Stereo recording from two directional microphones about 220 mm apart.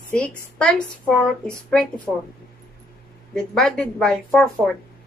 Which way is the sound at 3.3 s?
5° left (ahead or behind).